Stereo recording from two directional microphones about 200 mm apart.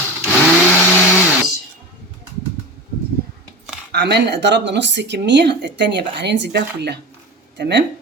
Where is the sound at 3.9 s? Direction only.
55° right (ahead or behind).